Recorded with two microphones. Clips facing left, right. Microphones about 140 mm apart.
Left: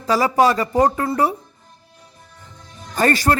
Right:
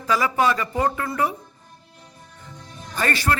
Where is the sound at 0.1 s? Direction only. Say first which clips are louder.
Left 5 dB; 35° left (ahead or behind).